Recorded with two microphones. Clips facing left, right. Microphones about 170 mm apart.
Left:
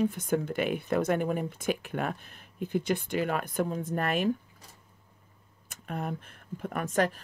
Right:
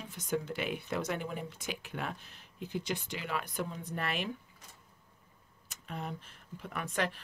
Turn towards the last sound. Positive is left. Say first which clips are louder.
# left 7 dB
turn(degrees=45)  # may be behind; listen again after turning